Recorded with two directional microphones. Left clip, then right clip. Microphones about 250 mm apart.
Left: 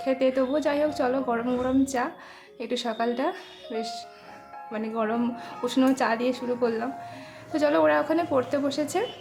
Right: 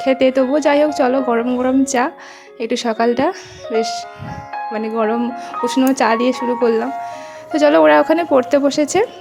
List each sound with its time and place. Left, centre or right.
0.0 s a woman's voice: right